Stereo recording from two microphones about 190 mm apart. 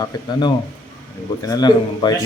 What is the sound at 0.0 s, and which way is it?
A man's voice, 20° left (ahead or behind).